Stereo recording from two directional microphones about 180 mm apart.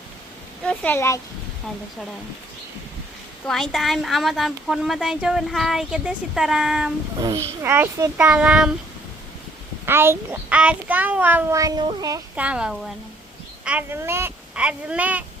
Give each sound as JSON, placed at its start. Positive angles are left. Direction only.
{"t": 0.6, "sound": "a sound", "side_deg": 5}
{"t": 0.9, "sound": "speech", "side_deg": 15}
{"t": 3.4, "sound": "speech", "side_deg": 0}
{"t": 7.2, "sound": "a child's voice", "side_deg": -20}
{"t": 9.8, "sound": "a child's voice", "side_deg": -10}
{"t": 12.4, "sound": "a child's voice", "side_deg": -5}